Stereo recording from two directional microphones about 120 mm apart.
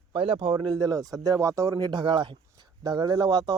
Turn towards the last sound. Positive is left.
turn(degrees=-35)  # may be behind; listen again after turning